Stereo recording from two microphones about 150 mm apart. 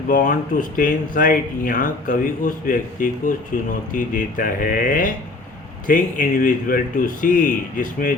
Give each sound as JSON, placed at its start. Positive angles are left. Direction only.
{"t": 0.1, "sound": "speech", "side_deg": 65}